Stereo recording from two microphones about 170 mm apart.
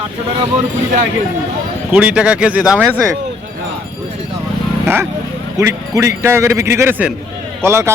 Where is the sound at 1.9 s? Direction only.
5° right (ahead or behind).